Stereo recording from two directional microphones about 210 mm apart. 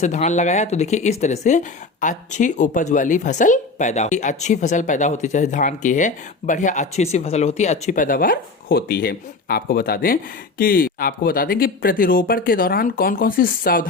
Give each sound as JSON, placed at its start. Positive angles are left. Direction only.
{"t": 0.0, "sound": "speech", "side_deg": 35}